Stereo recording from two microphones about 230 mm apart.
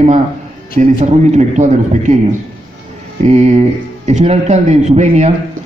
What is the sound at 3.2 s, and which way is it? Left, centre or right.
A man's voice, right.